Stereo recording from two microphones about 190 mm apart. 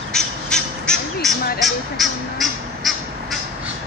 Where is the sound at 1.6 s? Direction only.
Centre (ahead or behind).